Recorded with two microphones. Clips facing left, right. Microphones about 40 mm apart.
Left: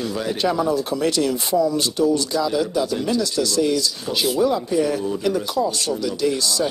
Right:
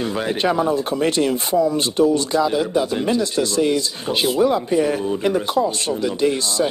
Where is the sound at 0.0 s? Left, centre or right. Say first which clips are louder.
Right 2 dB; right.